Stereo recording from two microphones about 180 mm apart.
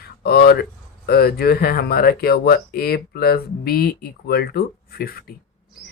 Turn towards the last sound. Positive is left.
turn(degrees=55)  # may be behind; listen again after turning